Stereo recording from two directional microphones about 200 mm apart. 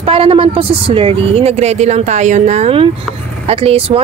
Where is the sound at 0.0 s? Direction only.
30° right (ahead or behind).